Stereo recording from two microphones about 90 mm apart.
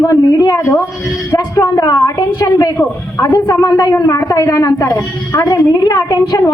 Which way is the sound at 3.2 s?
40° left (ahead or behind).